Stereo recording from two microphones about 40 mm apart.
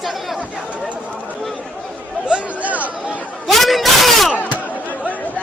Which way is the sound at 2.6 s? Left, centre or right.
Right.